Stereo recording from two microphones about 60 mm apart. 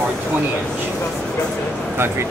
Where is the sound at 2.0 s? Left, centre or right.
Right.